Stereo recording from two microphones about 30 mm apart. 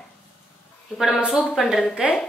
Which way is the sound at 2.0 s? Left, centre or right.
Right.